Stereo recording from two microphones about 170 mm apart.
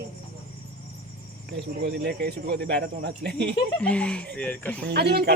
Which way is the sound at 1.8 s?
70° right (ahead or behind).